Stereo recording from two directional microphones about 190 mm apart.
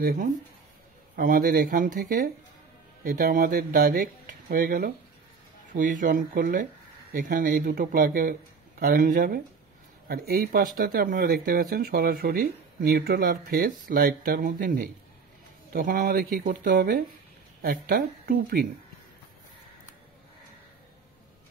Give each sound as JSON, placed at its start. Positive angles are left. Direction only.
{"t": 0.0, "sound": "speech", "side_deg": -45}